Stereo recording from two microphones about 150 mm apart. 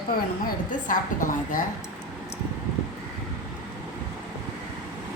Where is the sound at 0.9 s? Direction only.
60° left (ahead or behind).